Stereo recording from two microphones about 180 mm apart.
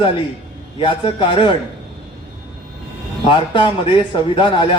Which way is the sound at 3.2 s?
30° left (ahead or behind).